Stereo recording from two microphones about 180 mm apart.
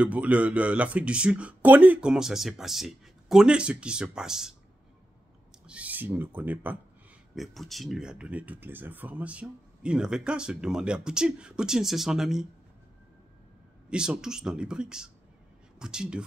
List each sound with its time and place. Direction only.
0.0 s speech: 10° right (ahead or behind)
5.7 s speech: 10° right (ahead or behind)
13.8 s speech: 5° right (ahead or behind)